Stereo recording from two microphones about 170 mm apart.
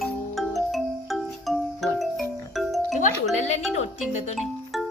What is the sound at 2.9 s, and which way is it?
Music, 45° left (ahead or behind).